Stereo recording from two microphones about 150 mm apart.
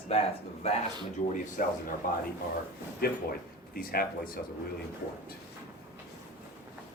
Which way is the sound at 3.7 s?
80° left.